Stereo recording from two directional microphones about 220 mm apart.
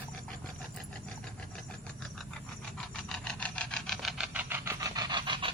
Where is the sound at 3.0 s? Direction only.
5° left (ahead or behind).